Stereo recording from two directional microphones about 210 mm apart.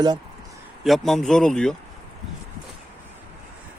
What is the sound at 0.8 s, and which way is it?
Speech, centre (ahead or behind).